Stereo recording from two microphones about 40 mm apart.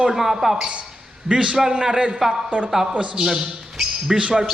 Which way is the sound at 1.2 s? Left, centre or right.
Right.